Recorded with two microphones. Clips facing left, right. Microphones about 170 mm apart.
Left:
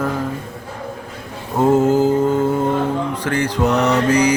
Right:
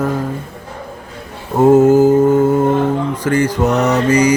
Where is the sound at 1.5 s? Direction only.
10° right (ahead or behind).